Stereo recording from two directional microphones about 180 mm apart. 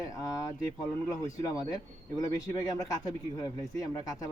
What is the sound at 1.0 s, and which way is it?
Speech, 20° left (ahead or behind).